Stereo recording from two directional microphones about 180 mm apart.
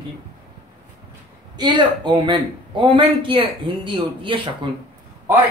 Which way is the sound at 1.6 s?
25° right (ahead or behind).